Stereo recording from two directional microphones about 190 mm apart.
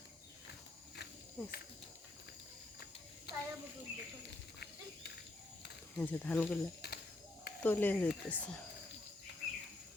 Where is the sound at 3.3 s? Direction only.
60° left (ahead or behind).